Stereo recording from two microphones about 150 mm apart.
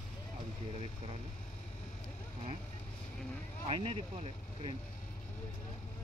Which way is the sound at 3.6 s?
40° right (ahead or behind).